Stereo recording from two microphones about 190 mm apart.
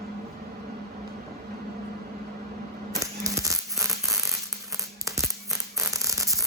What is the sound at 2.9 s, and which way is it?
Music, 15° right (ahead or behind).